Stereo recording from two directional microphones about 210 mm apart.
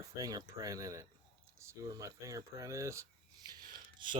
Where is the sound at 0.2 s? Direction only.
15° right (ahead or behind).